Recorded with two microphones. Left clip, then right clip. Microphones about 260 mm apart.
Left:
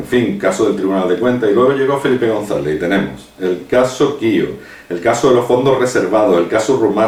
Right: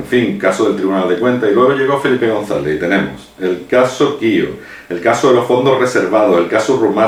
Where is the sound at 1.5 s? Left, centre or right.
Centre.